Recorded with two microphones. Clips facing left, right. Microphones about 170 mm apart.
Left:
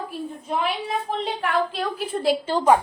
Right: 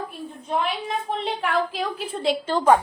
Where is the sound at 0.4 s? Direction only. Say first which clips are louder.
Right 1 dB; centre (ahead or behind).